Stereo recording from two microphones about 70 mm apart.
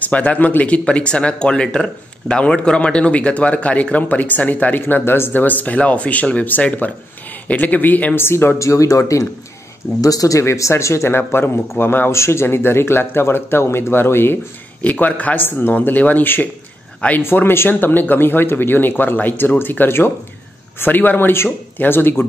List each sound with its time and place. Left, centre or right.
0.0 s speech: centre
8.5 s speech: left
10.4 s speech: left
14.8 s speech: left